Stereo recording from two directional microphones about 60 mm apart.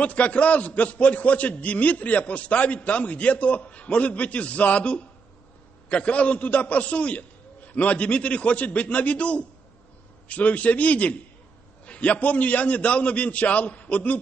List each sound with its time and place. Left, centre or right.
0.0 s a man's voice: left